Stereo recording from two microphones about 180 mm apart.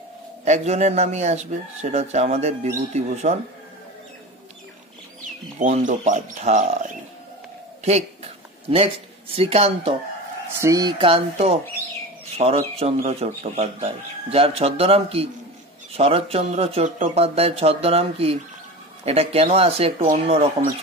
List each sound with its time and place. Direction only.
0.5 s speech: 40° right (ahead or behind)
5.6 s speech: 45° right (ahead or behind)
10.6 s speech: 20° right (ahead or behind)